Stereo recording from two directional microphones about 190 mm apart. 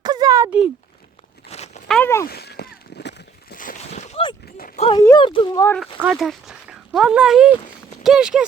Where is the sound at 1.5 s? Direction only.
35° left (ahead or behind).